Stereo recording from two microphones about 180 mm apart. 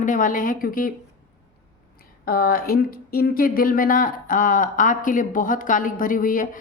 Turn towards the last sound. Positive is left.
turn(degrees=50)  # may be behind; listen again after turning